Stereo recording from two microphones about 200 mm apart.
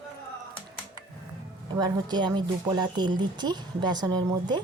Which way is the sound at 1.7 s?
20° right (ahead or behind).